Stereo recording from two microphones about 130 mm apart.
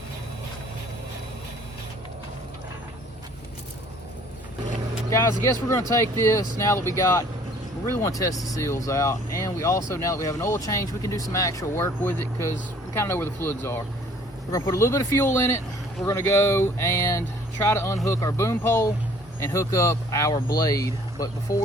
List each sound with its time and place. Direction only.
5.1 s speech: 25° left (ahead or behind)